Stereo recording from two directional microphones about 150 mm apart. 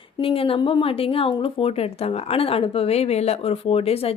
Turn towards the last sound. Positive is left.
turn(degrees=40)  # may be behind; listen again after turning